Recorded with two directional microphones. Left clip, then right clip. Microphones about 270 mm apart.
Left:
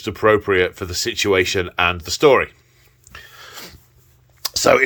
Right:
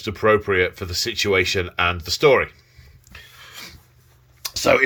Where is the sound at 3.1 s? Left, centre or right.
Centre.